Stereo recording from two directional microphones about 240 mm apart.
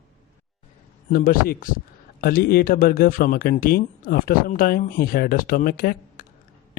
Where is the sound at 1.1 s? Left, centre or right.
Left.